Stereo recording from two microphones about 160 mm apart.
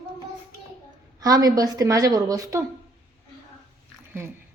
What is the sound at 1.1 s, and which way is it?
A woman's voice, 25° right (ahead or behind).